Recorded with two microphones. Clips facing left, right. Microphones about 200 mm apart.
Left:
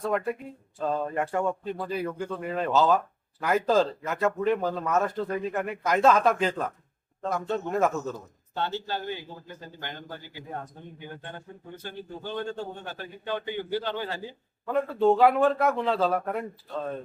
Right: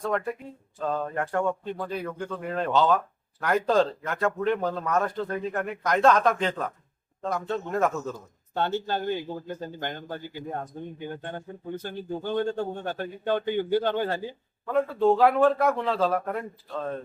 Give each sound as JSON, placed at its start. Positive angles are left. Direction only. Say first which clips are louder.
{"t": 0.8, "sound": "speech", "louder": "left 1 dB", "side_deg": 5}
{"t": 8.5, "sound": "a man's voice", "louder": "right 4 dB", "side_deg": -50}
{"t": 11.0, "sound": "a man's voice", "louder": "right 4 dB", "side_deg": -50}
{"t": 14.7, "sound": "speech", "louder": "right 1 dB", "side_deg": 0}